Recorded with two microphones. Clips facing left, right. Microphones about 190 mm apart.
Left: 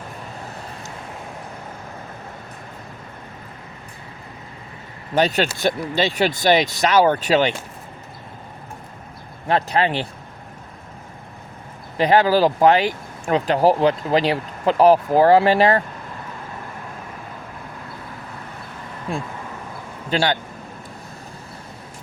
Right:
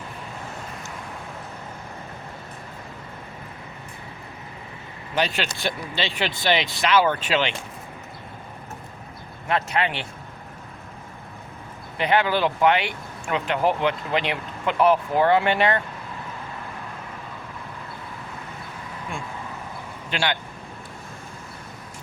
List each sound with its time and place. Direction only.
5.1 s speech: 45° left (ahead or behind)
9.5 s speech: 35° left (ahead or behind)
11.9 s speech: 35° left (ahead or behind)
20.1 s speech: 40° left (ahead or behind)